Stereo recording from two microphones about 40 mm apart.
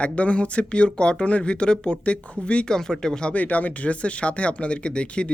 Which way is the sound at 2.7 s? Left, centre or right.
Centre.